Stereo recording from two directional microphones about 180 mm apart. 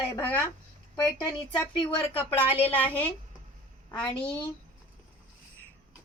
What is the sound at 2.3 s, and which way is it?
Speech, 30° left (ahead or behind).